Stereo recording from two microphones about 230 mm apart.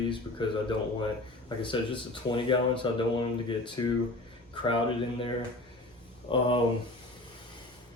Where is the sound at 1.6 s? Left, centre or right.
Left.